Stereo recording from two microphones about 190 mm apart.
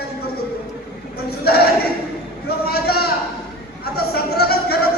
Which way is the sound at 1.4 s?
55° left (ahead or behind).